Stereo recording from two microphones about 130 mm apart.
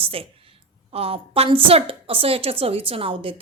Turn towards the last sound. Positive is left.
turn(degrees=-45)  # may be behind; listen again after turning